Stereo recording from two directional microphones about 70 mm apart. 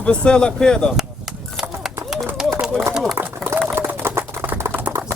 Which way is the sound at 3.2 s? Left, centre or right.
Right.